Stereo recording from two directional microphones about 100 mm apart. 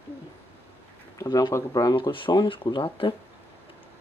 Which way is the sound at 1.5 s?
35° left (ahead or behind).